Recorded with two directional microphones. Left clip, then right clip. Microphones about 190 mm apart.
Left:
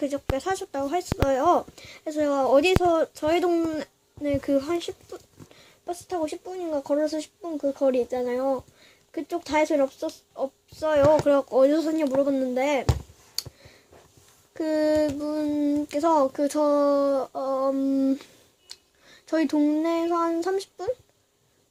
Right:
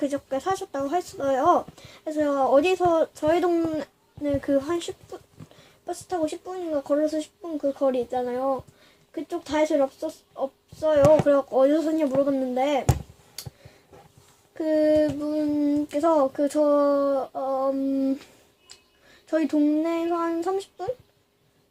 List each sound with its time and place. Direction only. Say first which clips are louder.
0.0 s speech: right 1 dB; 15° left (ahead or behind)
14.5 s speech: right 2 dB; 20° left (ahead or behind)
19.3 s speech: right 1 dB; 20° left (ahead or behind)